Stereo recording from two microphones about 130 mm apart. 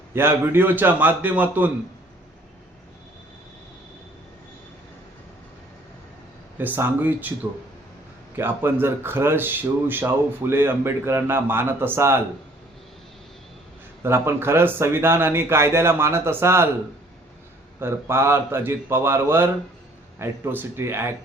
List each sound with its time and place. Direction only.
0.1 s speech: 15° right (ahead or behind)
6.6 s speech: 15° right (ahead or behind)
8.4 s speech: 15° right (ahead or behind)
14.0 s speech: 20° right (ahead or behind)
17.7 s speech: 20° right (ahead or behind)